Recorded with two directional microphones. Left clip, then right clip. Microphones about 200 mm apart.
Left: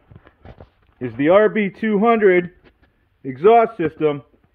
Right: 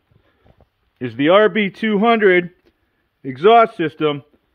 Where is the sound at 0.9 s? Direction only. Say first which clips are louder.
Right 1 dB; 25° right (ahead or behind).